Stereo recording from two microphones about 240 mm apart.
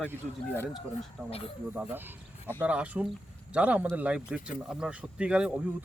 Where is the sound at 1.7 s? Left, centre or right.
Centre.